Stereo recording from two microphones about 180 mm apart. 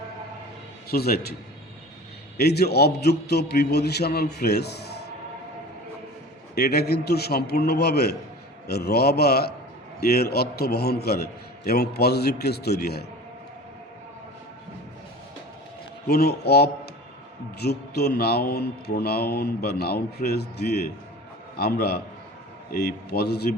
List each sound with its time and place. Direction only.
0.9 s a man's voice: 60° left (ahead or behind)
2.4 s a man's voice: 65° left (ahead or behind)
6.6 s a man's voice: 60° left (ahead or behind)
16.0 s a man's voice: 60° left (ahead or behind)
21.5 s a man's voice: 60° left (ahead or behind)